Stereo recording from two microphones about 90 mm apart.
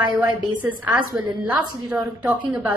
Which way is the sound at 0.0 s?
15° right (ahead or behind).